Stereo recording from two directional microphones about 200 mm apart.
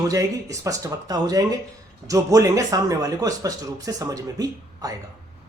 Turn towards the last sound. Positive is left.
turn(degrees=-20)  # may be behind; listen again after turning